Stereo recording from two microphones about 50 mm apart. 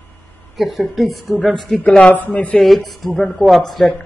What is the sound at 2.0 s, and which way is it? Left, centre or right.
Speech, left.